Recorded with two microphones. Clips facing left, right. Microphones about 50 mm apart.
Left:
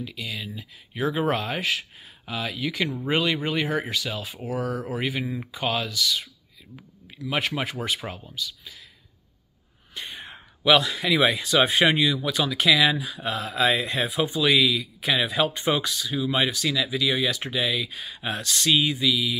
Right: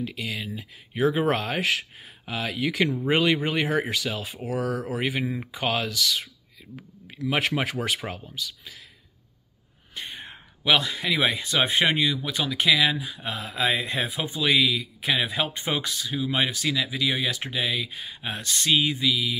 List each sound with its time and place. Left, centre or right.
0.0 s speech: right
4.9 s speech: right
5.9 s speech: right
7.2 s speech: right
8.0 s speech: centre
8.4 s speech: right
10.1 s speech: centre
14.8 s a man's voice: right
15.1 s speech: centre
16.1 s speech: centre